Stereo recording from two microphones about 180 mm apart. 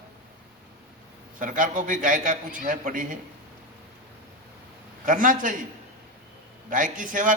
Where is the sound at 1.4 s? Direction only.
45° right (ahead or behind).